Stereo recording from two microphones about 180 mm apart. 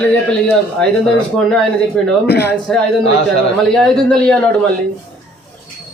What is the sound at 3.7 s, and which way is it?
Speech, 5° left (ahead or behind).